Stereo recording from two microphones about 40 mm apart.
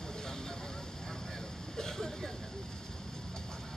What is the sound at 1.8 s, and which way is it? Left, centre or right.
Vehicle, centre.